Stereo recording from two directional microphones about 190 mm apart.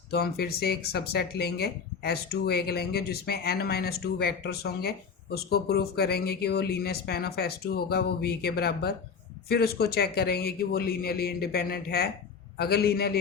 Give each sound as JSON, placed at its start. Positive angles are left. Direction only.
{"t": 0.1, "sound": "speech", "side_deg": 55}